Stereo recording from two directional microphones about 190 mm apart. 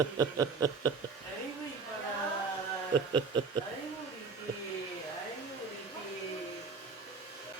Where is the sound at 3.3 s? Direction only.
25° right (ahead or behind).